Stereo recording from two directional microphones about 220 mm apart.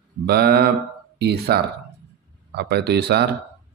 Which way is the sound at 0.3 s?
45° right (ahead or behind).